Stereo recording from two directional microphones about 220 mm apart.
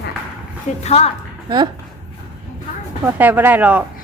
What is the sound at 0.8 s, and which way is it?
Speech, 30° left (ahead or behind).